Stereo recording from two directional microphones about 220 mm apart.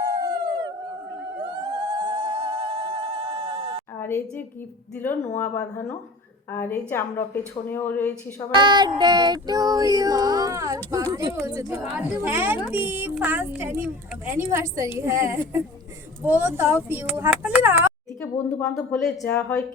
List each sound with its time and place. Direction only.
0.0 s howl: 20° right (ahead or behind)
1.7 s sheep: 15° right (ahead or behind)
3.9 s a sound: 10° left (ahead or behind)
4.9 s speech: 10° left (ahead or behind)
8.5 s child singing: 20° right (ahead or behind)
16.2 s speech: 10° right (ahead or behind)
19.1 s speech: 10° left (ahead or behind)